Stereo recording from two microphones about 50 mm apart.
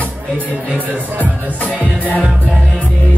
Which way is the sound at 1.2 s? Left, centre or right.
Right.